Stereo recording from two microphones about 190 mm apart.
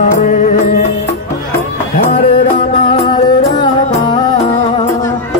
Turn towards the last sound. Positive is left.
turn(degrees=25)  # may be behind; listen again after turning